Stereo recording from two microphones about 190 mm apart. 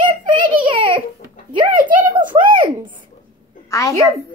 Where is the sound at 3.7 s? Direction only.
15° left (ahead or behind).